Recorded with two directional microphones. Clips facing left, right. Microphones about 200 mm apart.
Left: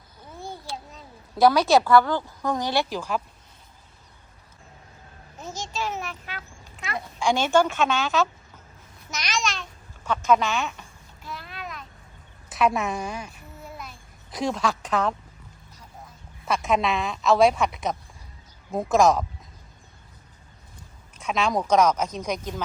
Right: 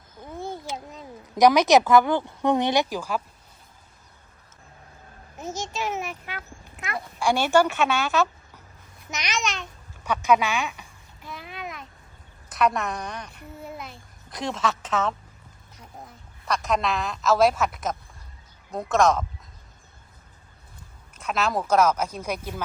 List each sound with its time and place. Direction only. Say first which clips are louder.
0.2 s a sound: right 5 dB; 20° right (ahead or behind)
1.9 s speech: even; 20° right (ahead or behind)
5.4 s a child's voice: right 1 dB; 20° right (ahead or behind)
10.7 s babbling: left 1 dB; 15° right (ahead or behind)
12.5 s speech: left 1 dB; centre (ahead or behind)
13.7 s child singing: right 2 dB; 25° right (ahead or behind)
14.3 s speech: left 2 dB; centre (ahead or behind)
16.5 s speech: left 2 dB; centre (ahead or behind)
21.2 s speech: left 1 dB; 5° right (ahead or behind)